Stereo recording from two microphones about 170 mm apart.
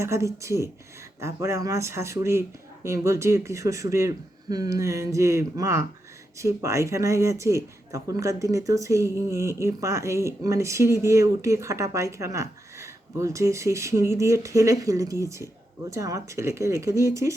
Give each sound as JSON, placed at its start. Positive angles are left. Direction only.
{"t": 0.0, "sound": "speech", "side_deg": -15}